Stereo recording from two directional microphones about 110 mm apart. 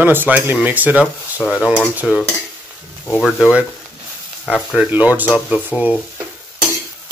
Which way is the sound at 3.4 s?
10° right (ahead or behind).